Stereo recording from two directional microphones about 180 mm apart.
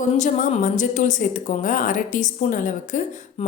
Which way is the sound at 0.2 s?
45° left (ahead or behind).